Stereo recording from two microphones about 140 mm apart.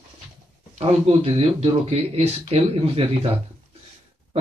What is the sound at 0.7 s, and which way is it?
Speech, 50° right (ahead or behind).